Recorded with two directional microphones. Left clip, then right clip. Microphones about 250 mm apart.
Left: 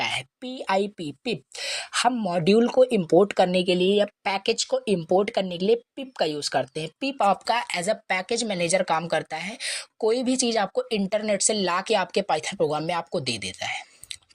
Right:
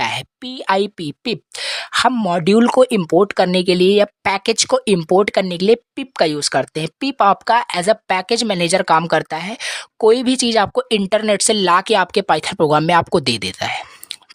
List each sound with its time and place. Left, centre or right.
0.0 s speech: right